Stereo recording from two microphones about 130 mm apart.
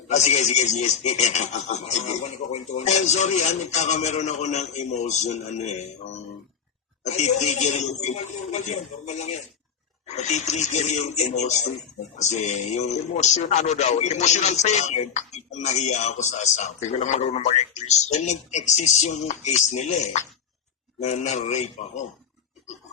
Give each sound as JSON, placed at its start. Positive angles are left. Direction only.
{"t": 0.1, "sound": "speech", "side_deg": 60}